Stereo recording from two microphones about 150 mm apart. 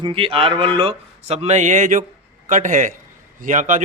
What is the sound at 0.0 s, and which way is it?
A man's voice, 35° right (ahead or behind).